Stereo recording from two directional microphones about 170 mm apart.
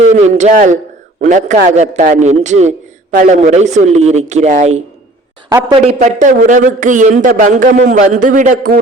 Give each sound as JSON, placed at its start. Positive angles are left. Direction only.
{"t": 0.0, "sound": "a man's voice", "side_deg": -40}
{"t": 5.5, "sound": "a man's voice", "side_deg": -15}
{"t": 5.7, "sound": "a man's voice", "side_deg": -35}